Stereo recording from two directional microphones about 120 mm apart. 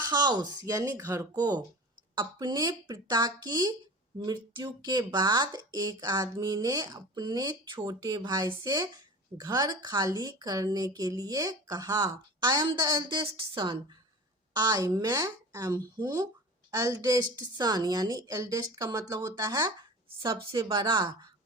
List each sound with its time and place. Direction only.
0.1 s a woman's voice: 35° right (ahead or behind)
13.0 s speech: 45° right (ahead or behind)
14.7 s a woman's voice: 30° right (ahead or behind)
20.1 s speech: 50° right (ahead or behind)